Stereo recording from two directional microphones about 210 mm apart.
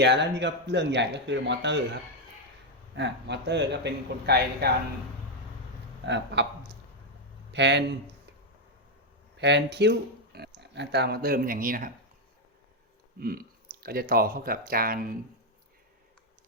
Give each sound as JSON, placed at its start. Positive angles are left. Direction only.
{"t": 0.0, "sound": "speech", "side_deg": -55}
{"t": 6.1, "sound": "speech", "side_deg": -55}
{"t": 7.5, "sound": "speech", "side_deg": -55}
{"t": 9.4, "sound": "speech", "side_deg": -55}
{"t": 13.1, "sound": "speech", "side_deg": -45}